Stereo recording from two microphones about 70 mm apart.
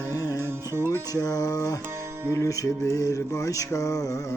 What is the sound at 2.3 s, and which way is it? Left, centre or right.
Music, left.